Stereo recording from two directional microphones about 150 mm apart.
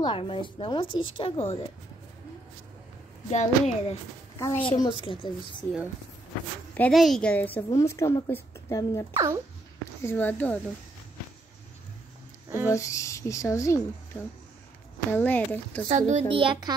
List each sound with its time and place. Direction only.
0.0 s a woman's voice: 35° left (ahead or behind)
3.3 s a woman's voice: 50° left (ahead or behind)
4.5 s a woman's voice: 35° left (ahead or behind)
6.7 s a woman's voice: 5° left (ahead or behind)
9.1 s a child's voice: 20° right (ahead or behind)
10.0 s a woman's voice: 15° left (ahead or behind)
12.6 s speech: 20° left (ahead or behind)
15.0 s a woman's voice: 10° left (ahead or behind)
15.9 s a child's voice: 45° right (ahead or behind)